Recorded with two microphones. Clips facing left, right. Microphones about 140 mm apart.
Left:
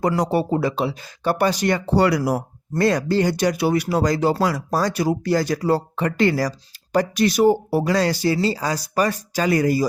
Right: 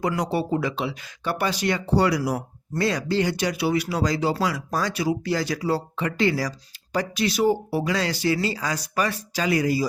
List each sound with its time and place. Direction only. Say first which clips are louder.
0.0 s speech: left 4 dB; 40° left (ahead or behind)
2.0 s speech: left 4 dB; 55° left (ahead or behind)